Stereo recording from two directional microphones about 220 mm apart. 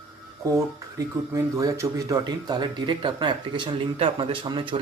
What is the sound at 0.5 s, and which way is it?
Speech, 15° right (ahead or behind).